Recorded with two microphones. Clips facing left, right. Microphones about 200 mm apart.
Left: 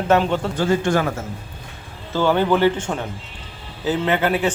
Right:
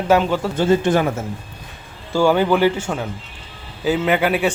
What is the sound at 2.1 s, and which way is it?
A man's voice, 10° right (ahead or behind).